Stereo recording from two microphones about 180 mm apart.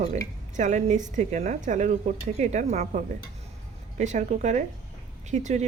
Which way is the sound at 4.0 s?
40° right (ahead or behind).